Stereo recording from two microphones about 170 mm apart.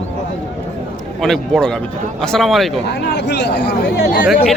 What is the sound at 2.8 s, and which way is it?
Speech, 90° left.